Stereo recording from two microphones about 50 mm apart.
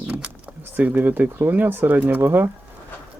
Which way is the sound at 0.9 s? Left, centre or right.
Right.